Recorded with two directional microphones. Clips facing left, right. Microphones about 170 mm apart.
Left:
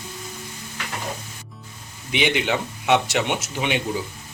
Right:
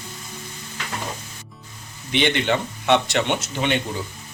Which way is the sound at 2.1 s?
10° left (ahead or behind).